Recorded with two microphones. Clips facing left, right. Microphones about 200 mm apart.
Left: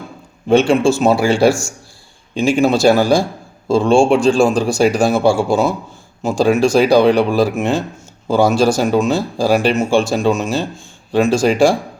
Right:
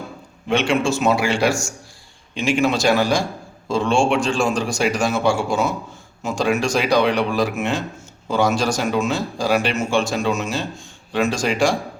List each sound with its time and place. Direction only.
0.4 s a man's voice: 30° left (ahead or behind)